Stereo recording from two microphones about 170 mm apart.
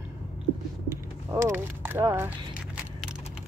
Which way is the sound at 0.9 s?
15° right (ahead or behind).